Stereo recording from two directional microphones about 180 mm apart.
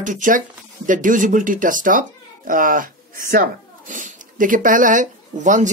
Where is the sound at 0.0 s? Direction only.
45° right (ahead or behind).